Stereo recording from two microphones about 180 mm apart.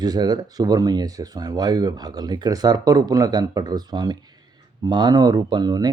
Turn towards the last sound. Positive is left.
turn(degrees=-20)  # may be behind; listen again after turning